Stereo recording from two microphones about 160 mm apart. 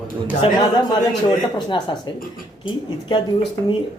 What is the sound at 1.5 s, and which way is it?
Speech, 30° left (ahead or behind).